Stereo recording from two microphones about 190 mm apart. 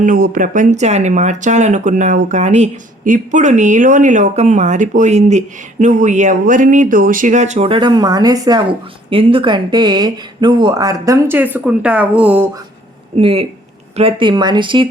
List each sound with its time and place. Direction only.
0.0 s speech: 45° right (ahead or behind); by 12.5 s 10° right (ahead or behind)
13.1 s speech: 30° right (ahead or behind)